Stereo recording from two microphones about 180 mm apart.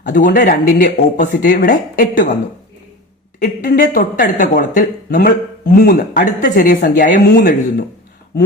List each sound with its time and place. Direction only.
0.3 s speech: 50° left (ahead or behind)
3.4 s speech: 50° left (ahead or behind)